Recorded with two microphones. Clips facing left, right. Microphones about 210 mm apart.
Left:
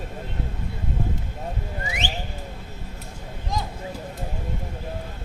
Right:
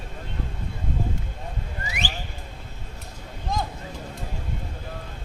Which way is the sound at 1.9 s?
20° left (ahead or behind).